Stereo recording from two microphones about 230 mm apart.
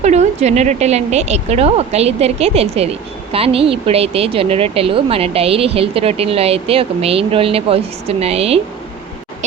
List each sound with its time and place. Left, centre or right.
0.0 s speech: right